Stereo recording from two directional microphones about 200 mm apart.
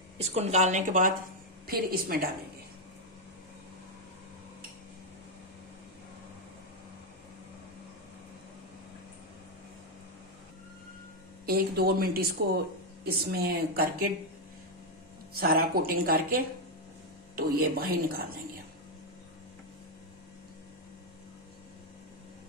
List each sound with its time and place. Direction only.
0.2 s a woman's voice: 30° right (ahead or behind); by 2.2 s 45° right (ahead or behind)
11.4 s speech: 50° right (ahead or behind)
15.3 s speech: 50° right (ahead or behind)